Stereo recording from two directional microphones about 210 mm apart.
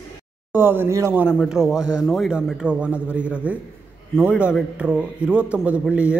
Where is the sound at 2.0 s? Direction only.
Centre (ahead or behind).